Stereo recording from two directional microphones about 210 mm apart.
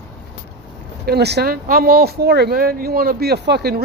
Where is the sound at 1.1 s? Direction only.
50° right (ahead or behind).